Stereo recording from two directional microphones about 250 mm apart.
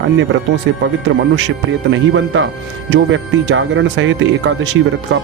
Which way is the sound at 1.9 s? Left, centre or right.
Right.